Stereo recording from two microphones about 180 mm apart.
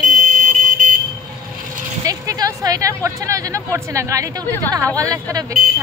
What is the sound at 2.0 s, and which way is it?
Speech, 20° right (ahead or behind).